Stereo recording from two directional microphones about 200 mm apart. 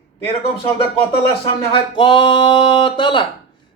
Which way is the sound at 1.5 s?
25° left (ahead or behind).